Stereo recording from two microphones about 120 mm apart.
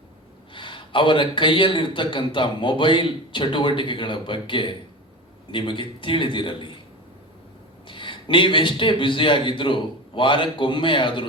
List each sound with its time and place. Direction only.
0.5 s a man's voice: 45° left (ahead or behind)
7.9 s a man's voice: 45° left (ahead or behind)